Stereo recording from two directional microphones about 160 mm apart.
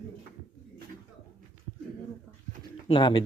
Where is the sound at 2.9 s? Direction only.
30° left (ahead or behind).